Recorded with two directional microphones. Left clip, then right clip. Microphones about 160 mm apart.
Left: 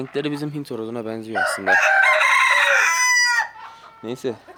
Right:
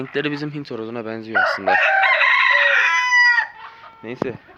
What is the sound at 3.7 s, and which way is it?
Chicken, 40° left (ahead or behind).